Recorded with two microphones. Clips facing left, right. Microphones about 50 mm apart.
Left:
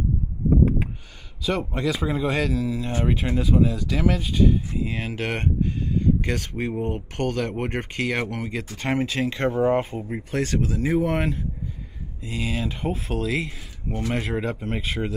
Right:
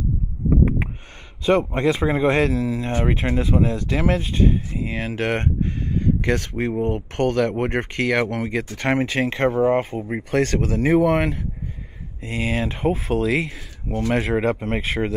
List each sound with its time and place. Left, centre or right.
1.7 s speech: right
2.5 s speech: centre
3.1 s speech: right
10.0 s speech: right
13.8 s speech: centre
14.1 s speech: right